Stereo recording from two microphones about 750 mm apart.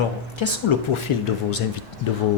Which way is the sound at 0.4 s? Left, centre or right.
Left.